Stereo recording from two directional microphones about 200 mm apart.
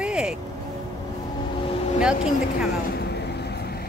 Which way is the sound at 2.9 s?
55° left (ahead or behind).